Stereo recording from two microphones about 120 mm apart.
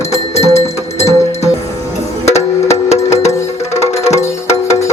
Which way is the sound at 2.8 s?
65° left (ahead or behind).